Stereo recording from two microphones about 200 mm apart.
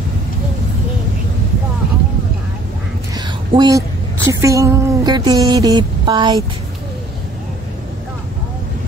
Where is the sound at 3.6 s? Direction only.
15° right (ahead or behind).